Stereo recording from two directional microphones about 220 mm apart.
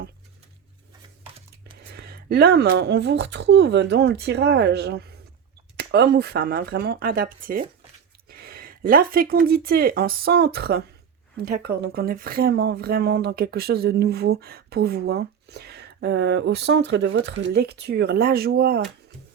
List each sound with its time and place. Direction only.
1.9 s speech: 45° right (ahead or behind)